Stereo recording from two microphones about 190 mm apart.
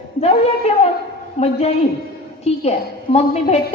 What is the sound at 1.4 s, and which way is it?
A woman's voice, 35° left (ahead or behind).